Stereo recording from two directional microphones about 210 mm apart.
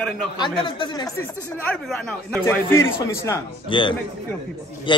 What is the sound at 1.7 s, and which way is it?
A man's voice, 5° left (ahead or behind).